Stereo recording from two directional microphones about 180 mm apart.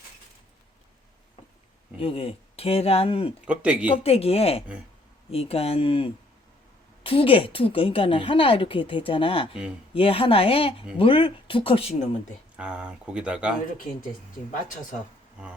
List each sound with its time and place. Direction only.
2.0 s a woman's voice: 30° left (ahead or behind)
3.4 s speech: 5° right (ahead or behind)
3.8 s a woman's voice: 30° left (ahead or behind)
12.5 s speech: 5° right (ahead or behind)